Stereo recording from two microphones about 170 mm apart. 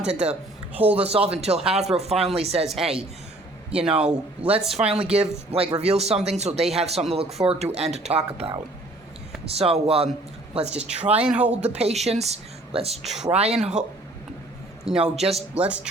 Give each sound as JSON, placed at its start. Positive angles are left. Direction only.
{"t": 0.1, "sound": "speech", "side_deg": -40}
{"t": 0.7, "sound": "a man's voice", "side_deg": -10}
{"t": 1.0, "sound": "speech", "side_deg": -35}
{"t": 2.6, "sound": "a man's voice", "side_deg": 0}
{"t": 5.0, "sound": "speech", "side_deg": -35}
{"t": 9.6, "sound": "speech", "side_deg": -35}
{"t": 10.7, "sound": "a man's voice", "side_deg": -5}
{"t": 11.6, "sound": "speech", "side_deg": -40}
{"t": 13.0, "sound": "a man's voice", "side_deg": 0}
{"t": 14.8, "sound": "a man's voice", "side_deg": -5}
{"t": 15.2, "sound": "speech", "side_deg": -35}
{"t": 15.5, "sound": "speech", "side_deg": -5}